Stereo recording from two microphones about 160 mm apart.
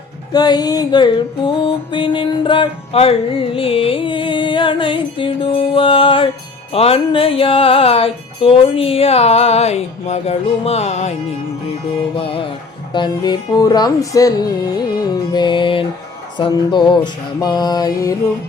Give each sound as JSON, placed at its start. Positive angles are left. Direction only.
{"t": 0.3, "sound": "music", "side_deg": 25}
{"t": 12.1, "sound": "music", "side_deg": 35}